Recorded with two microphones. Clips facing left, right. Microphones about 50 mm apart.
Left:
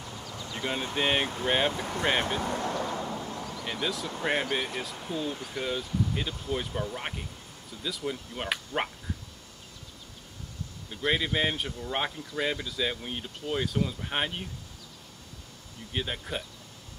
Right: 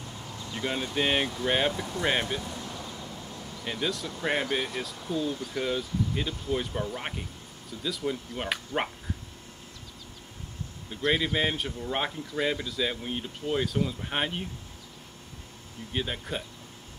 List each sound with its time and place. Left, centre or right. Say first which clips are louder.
0.3 s a sound: right 1 dB; left
0.9 s speech: even; centre
1.2 s speech: even; left
2.2 s vehicle: left 5 dB; left
3.6 s speech: right 2 dB; centre
5.5 s speech: right 2 dB; centre
10.9 s speech: right 1 dB; centre
15.9 s speech: right 1 dB; centre